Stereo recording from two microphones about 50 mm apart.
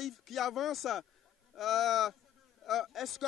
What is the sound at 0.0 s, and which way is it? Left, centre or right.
A man's voice, centre.